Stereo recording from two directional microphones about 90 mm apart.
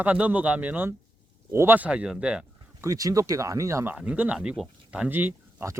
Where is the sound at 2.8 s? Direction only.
40° right (ahead or behind).